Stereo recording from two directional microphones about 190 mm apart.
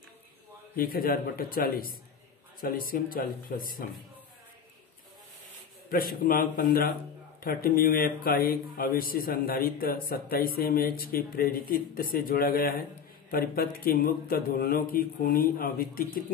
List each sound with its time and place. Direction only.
0.7 s a man's voice: 50° left (ahead or behind)
5.9 s a man's voice: 50° left (ahead or behind)